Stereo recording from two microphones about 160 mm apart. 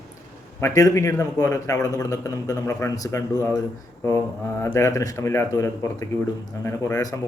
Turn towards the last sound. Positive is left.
turn(degrees=20)  # may be behind; listen again after turning